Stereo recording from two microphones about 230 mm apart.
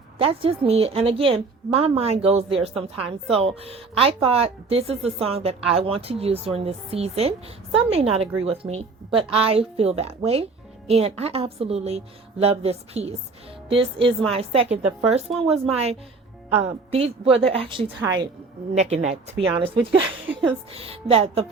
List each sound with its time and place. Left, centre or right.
0.2 s a woman's voice: right